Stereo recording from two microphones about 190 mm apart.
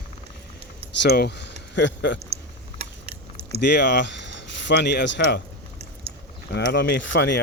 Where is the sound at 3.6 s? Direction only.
65° left (ahead or behind).